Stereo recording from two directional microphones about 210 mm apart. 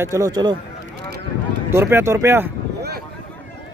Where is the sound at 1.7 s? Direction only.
10° right (ahead or behind).